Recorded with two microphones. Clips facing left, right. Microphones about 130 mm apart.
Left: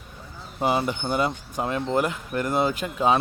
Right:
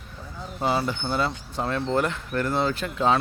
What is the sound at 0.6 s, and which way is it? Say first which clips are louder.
Speech: left 1 dB; 15° left (ahead or behind).